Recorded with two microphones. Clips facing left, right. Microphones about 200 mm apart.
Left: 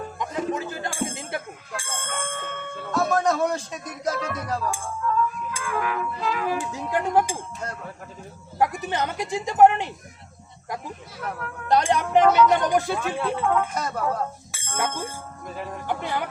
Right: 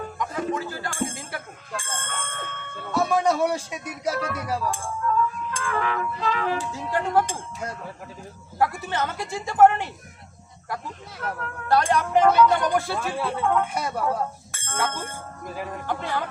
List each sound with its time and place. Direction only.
0.2 s music: 20° left (ahead or behind)
1.7 s bicycle bell: 10° left (ahead or behind)
2.9 s speech: 10° right (ahead or behind)
4.7 s music: 10° left (ahead or behind)
7.6 s speech: 10° right (ahead or behind)
8.5 s speech: 15° left (ahead or behind)
11.2 s speech: 5° left (ahead or behind)
11.7 s speech: 20° left (ahead or behind)
13.0 s speech: centre (ahead or behind)
13.7 s speech: 10° right (ahead or behind)
14.5 s bicycle bell: 10° left (ahead or behind)
14.8 s speech: 10° left (ahead or behind)
15.4 s speech: centre (ahead or behind)
15.9 s speech: 15° left (ahead or behind)